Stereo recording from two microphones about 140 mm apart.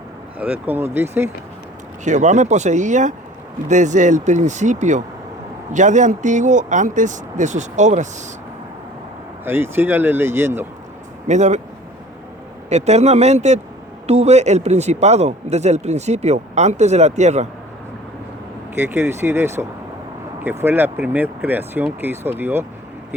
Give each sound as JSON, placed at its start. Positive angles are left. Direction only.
{"t": 0.3, "sound": "speech", "side_deg": -10}
{"t": 2.0, "sound": "speech", "side_deg": -60}
{"t": 9.4, "sound": "speech", "side_deg": -15}
{"t": 11.3, "sound": "speech", "side_deg": -55}
{"t": 12.6, "sound": "speech", "side_deg": -55}
{"t": 18.8, "sound": "speech", "side_deg": -15}